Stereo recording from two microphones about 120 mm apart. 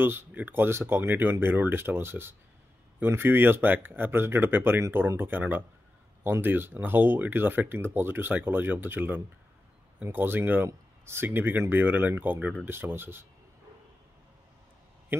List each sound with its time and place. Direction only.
0.0 s speech: 20° right (ahead or behind)